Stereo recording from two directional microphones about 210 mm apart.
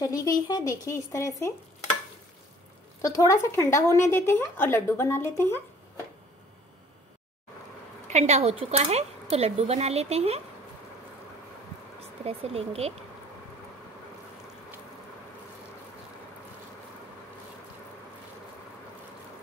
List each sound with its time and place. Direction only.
0.0 s speech: 15° left (ahead or behind)
3.0 s speech: 15° left (ahead or behind)
8.1 s speech: 30° right (ahead or behind)
12.0 s speech: 30° right (ahead or behind)